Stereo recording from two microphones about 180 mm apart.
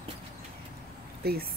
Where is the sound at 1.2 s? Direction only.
60° right (ahead or behind).